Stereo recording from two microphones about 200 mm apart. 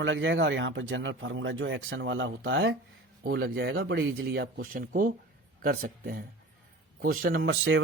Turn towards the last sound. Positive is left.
turn(degrees=-80)